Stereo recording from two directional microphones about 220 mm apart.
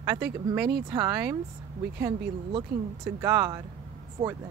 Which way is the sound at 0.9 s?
15° right (ahead or behind).